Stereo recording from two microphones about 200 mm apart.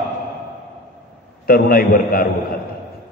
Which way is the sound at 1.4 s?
45° left (ahead or behind).